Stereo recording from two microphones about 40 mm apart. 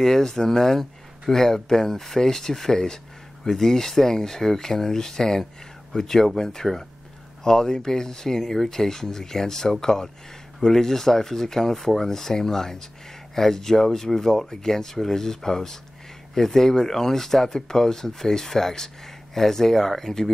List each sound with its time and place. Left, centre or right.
0.0 s speech: centre